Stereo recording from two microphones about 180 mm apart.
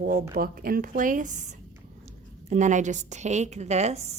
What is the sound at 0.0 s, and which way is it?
A woman's voice, 55° right (ahead or behind).